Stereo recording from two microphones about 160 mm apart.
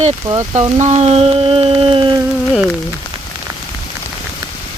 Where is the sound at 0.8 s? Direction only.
45° right (ahead or behind).